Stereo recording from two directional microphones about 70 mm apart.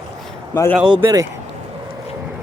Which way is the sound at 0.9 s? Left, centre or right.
Right.